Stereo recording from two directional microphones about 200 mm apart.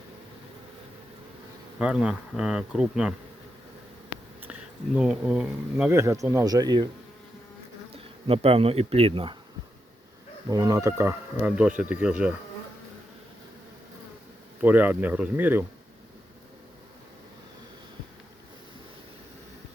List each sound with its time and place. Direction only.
1.8 s speech: 5° right (ahead or behind)
4.9 s speech: 5° right (ahead or behind); by 6.8 s 20° right (ahead or behind)
7.9 s speech: 30° right (ahead or behind)
10.5 s speech: 15° right (ahead or behind)
14.6 s speech: 10° right (ahead or behind)